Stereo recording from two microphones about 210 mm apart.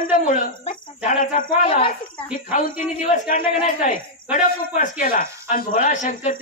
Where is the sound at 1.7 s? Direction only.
25° left (ahead or behind).